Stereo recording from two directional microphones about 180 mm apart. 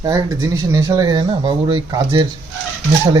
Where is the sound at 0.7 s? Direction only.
20° right (ahead or behind).